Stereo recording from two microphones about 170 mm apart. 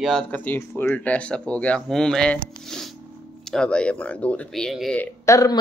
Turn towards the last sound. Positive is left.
turn(degrees=20)  # may be behind; listen again after turning